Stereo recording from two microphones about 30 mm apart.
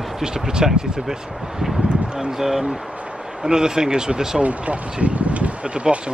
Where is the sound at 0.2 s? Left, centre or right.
Right.